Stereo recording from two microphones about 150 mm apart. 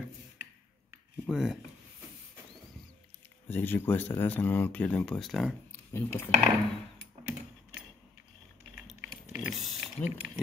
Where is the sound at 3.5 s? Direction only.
15° left (ahead or behind).